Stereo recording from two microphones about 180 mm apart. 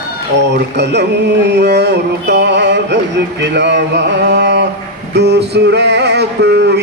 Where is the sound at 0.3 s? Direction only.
70° right (ahead or behind).